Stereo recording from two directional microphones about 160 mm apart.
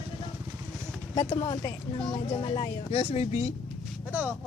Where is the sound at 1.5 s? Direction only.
30° left (ahead or behind).